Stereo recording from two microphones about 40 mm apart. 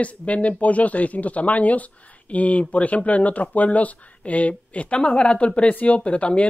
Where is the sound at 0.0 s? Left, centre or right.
Left.